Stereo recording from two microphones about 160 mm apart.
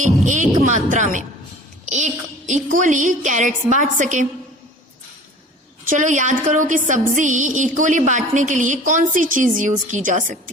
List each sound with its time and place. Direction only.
0.0 s music: 50° right (ahead or behind)
2.7 s a woman's voice: 55° right (ahead or behind)
5.9 s a woman's voice: 50° right (ahead or behind)